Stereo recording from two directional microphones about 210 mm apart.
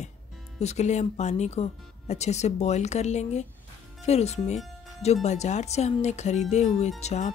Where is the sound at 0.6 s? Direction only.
30° left (ahead or behind).